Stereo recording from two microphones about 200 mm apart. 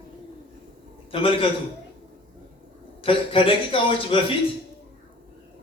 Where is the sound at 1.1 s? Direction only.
25° left (ahead or behind).